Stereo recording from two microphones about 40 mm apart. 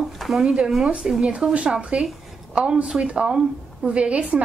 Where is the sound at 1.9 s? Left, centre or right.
Right.